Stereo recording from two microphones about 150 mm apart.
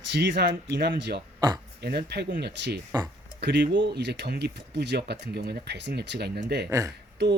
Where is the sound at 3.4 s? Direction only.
90° right.